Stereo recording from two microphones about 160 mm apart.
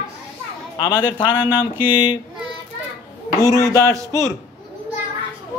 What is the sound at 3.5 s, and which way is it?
Speech, 20° left (ahead or behind).